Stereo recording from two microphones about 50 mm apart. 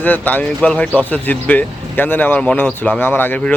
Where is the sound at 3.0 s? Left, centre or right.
Left.